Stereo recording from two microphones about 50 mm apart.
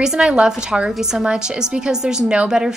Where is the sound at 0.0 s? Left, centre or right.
Centre.